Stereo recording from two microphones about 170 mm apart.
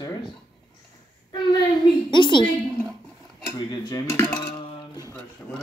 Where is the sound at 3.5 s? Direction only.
15° left (ahead or behind).